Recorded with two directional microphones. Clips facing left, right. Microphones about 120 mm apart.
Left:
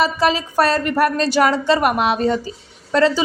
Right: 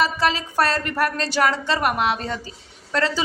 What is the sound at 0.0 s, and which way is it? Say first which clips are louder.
A woman's voice: left 4 dB; 15° left (ahead or behind).